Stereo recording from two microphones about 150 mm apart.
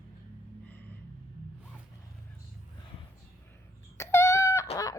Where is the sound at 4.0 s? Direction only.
15° left (ahead or behind).